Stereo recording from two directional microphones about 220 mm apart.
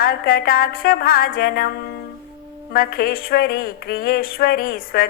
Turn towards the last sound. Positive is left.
turn(degrees=40)  # may be behind; listen again after turning